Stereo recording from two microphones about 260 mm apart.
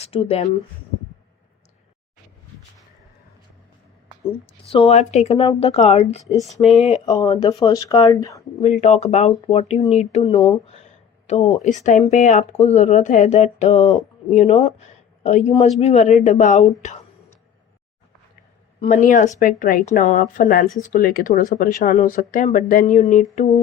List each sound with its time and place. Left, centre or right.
0.0 s speech: left
4.7 s speech: left
7.1 s speech: centre
8.6 s speech: left
18.8 s speech: left